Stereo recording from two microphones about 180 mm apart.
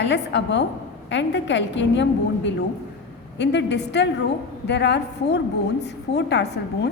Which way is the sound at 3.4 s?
75° left (ahead or behind).